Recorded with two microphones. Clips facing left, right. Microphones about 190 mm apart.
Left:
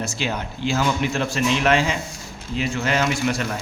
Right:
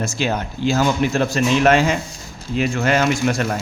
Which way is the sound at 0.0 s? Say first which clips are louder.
Right 4 dB; 45° right (ahead or behind).